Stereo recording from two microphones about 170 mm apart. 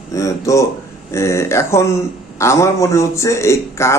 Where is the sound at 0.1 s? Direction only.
20° left (ahead or behind).